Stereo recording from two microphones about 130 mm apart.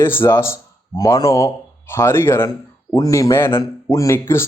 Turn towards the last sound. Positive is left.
turn(degrees=20)  # may be behind; listen again after turning